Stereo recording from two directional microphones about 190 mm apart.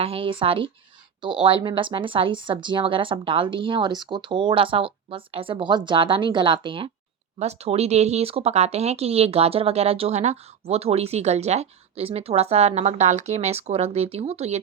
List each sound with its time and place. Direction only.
0.0 s speech: 30° right (ahead or behind)